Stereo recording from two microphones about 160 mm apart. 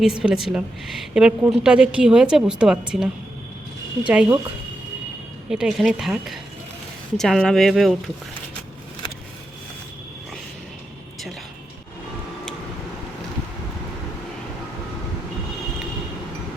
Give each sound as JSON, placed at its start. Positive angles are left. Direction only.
{"t": 0.0, "sound": "a woman's voice", "side_deg": -5}
{"t": 5.5, "sound": "a woman's voice", "side_deg": -5}